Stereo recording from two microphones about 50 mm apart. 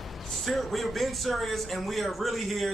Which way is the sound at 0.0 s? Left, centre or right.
Centre.